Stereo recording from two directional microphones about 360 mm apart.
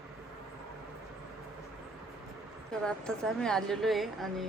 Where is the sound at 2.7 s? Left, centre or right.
Centre.